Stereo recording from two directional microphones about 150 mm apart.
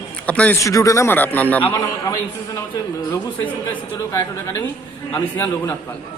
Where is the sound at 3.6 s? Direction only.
20° left (ahead or behind).